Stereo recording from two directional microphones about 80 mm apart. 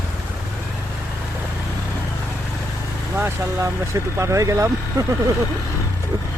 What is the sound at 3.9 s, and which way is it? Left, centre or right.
Speech, right.